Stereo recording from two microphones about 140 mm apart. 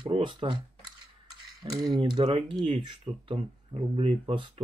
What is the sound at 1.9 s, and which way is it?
Speech, 30° right (ahead or behind).